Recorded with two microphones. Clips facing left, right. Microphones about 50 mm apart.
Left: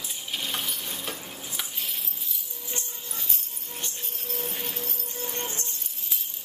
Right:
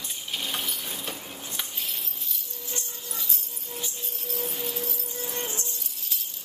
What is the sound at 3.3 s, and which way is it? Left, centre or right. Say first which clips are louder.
Music: right 1 dB; left.